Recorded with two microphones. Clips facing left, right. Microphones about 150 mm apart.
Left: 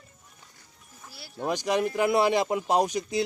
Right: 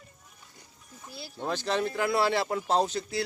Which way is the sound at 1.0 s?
20° right (ahead or behind).